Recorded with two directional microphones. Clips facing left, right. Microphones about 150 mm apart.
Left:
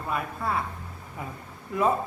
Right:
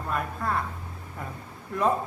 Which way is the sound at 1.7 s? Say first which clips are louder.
Left 2 dB; 5° left (ahead or behind).